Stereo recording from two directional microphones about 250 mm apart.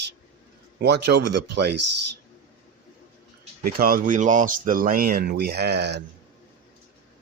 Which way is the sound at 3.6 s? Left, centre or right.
Right.